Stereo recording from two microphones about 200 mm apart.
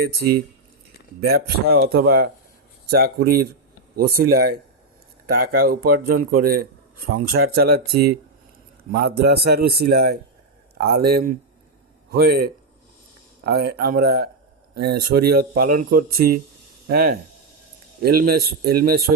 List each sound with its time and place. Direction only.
1.2 s a man's voice: 50° right (ahead or behind)